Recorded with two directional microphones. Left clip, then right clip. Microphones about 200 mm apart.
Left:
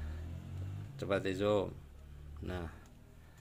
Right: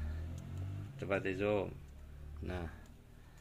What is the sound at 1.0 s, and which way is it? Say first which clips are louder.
Speech: left 2 dB; 20° left (ahead or behind).